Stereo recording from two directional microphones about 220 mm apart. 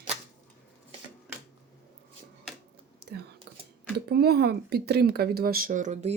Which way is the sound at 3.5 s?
45° right (ahead or behind).